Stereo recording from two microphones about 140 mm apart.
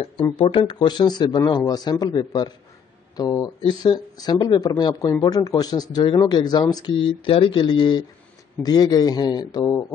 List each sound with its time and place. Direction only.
0.0 s speech: 40° left (ahead or behind)